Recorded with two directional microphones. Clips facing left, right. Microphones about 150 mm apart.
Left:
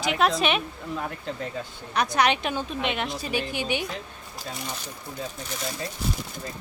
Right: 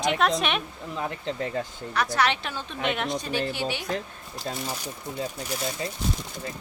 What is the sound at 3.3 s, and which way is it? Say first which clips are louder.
Speech: even; 15° left (ahead or behind).